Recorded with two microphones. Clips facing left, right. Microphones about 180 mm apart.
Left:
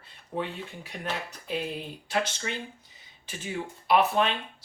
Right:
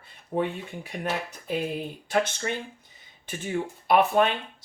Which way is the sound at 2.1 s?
50° right (ahead or behind).